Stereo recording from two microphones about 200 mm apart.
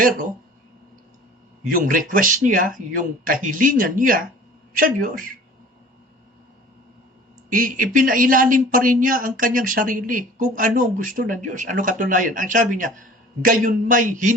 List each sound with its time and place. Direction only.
1.6 s speech: 40° right (ahead or behind)
7.5 s speech: 45° right (ahead or behind)